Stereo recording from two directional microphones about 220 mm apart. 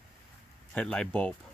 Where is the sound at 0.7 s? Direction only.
5° left (ahead or behind).